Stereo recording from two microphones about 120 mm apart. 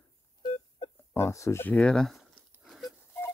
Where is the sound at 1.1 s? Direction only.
25° left (ahead or behind).